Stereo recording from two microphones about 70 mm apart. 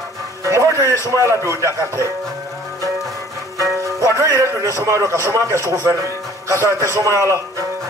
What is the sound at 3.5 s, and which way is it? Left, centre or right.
Music, right.